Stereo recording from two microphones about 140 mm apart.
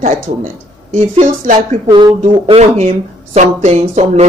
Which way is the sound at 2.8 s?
50° right (ahead or behind).